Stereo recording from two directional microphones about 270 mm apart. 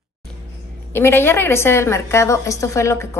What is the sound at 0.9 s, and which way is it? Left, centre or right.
A woman's voice, centre.